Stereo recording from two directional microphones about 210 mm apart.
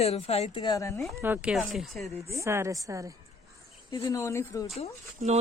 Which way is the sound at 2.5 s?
15° right (ahead or behind).